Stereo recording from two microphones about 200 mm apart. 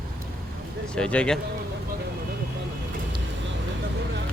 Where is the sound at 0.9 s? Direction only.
5° left (ahead or behind).